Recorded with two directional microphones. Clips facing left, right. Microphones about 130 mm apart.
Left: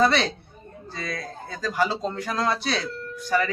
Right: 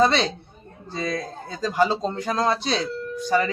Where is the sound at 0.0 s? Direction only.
20° right (ahead or behind).